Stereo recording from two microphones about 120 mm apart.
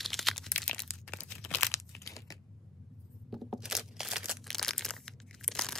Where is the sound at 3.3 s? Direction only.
Centre (ahead or behind).